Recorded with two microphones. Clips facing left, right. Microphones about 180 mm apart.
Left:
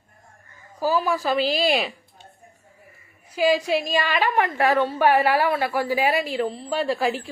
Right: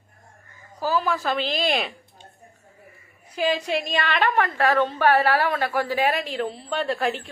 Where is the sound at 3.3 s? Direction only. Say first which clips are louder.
Left 3 dB; 10° left (ahead or behind).